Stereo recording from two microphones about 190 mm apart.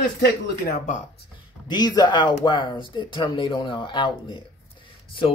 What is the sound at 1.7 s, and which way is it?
Speech, 20° left (ahead or behind).